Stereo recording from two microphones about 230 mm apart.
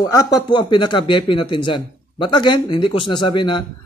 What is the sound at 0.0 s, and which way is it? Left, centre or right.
Speech, centre.